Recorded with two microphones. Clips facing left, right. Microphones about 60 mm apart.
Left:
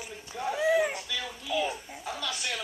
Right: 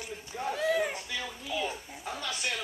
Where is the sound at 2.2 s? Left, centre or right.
Right.